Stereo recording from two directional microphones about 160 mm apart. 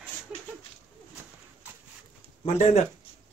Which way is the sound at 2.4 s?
40° left (ahead or behind).